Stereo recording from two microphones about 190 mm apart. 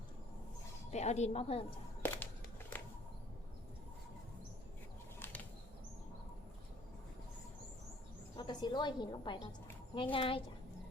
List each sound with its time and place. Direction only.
0.9 s a woman's voice: 35° left (ahead or behind)
2.0 s music: 10° left (ahead or behind)
2.7 s a sound: 10° left (ahead or behind)
5.2 s bird flight: 10° left (ahead or behind)
8.4 s a woman's voice: 25° left (ahead or behind)